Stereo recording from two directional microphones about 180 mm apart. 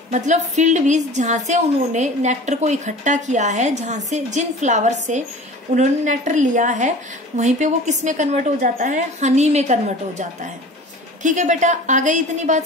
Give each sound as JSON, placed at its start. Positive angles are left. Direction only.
{"t": 0.1, "sound": "a woman's voice", "side_deg": -40}